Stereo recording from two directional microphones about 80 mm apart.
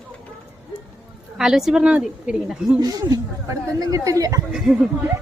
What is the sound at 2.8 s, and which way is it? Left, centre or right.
Speech, right.